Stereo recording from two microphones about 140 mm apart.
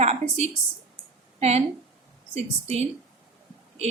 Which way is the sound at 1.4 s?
50° right (ahead or behind).